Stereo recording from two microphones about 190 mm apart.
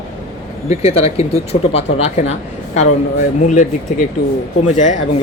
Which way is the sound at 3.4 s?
40° left (ahead or behind).